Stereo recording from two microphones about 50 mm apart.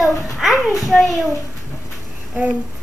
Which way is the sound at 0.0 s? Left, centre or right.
Centre.